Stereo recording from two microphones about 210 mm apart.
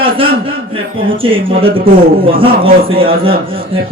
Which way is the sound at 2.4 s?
25° right (ahead or behind).